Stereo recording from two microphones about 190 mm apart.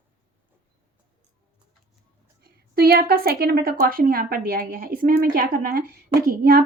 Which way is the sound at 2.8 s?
55° right (ahead or behind).